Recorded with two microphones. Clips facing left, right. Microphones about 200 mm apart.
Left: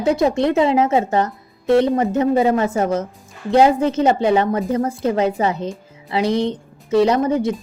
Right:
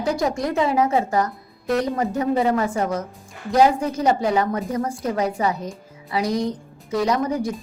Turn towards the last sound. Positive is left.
turn(degrees=25)  # may be behind; listen again after turning